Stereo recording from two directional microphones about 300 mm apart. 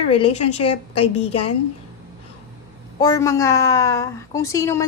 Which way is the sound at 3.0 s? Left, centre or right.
Centre.